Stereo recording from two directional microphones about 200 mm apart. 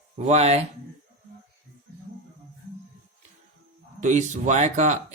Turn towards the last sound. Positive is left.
turn(degrees=-35)  # may be behind; listen again after turning